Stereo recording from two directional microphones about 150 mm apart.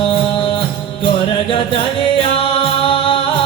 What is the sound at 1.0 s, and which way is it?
Music, 35° left (ahead or behind).